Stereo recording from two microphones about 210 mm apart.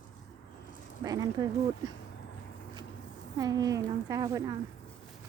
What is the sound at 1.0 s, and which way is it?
Speech, 15° right (ahead or behind).